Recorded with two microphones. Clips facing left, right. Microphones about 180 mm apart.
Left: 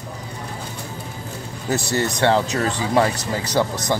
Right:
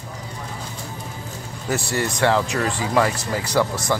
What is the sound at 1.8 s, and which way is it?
Speech, 20° left (ahead or behind).